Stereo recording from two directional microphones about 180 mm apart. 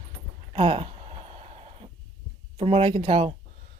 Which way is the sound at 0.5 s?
30° right (ahead or behind).